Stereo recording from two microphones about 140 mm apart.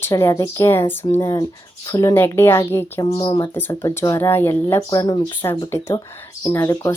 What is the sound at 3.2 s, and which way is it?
Speech, 30° left (ahead or behind).